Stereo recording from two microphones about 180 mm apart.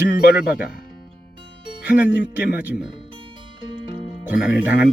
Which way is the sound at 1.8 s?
10° right (ahead or behind).